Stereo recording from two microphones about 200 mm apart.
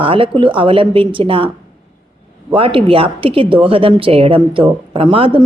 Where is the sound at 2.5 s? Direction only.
25° right (ahead or behind).